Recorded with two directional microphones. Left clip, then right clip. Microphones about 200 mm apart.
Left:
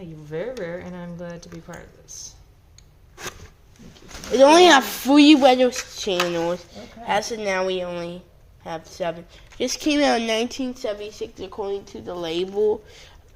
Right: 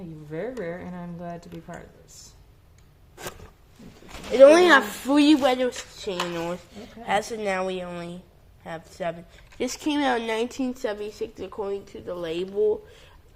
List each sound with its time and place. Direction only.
0.3 s speech: 50° left (ahead or behind)
4.4 s speech: 25° left (ahead or behind)
6.8 s a woman's voice: centre (ahead or behind)
9.8 s speech: 20° left (ahead or behind)
10.6 s a woman's voice: 15° right (ahead or behind)
11.4 s speech: centre (ahead or behind)
11.9 s speech: 20° left (ahead or behind)